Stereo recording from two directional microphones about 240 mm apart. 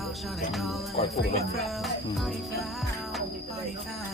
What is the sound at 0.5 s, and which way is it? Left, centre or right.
Speech, centre.